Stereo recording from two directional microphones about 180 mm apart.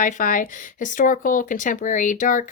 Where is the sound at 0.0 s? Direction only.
45° left (ahead or behind).